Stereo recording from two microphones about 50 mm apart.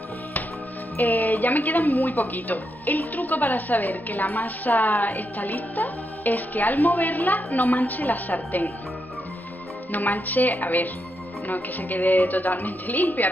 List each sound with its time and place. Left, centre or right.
0.9 s a woman's voice: left
2.3 s a woman's voice: left
10.2 s a woman's voice: left